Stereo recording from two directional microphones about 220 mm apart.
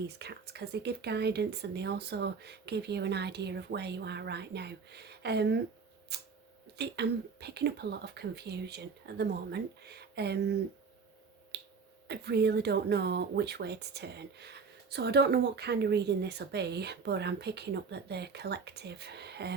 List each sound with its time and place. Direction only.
0.2 s speech: 50° right (ahead or behind)
11.5 s finger snapping: 50° right (ahead or behind)
12.0 s speech: 50° right (ahead or behind)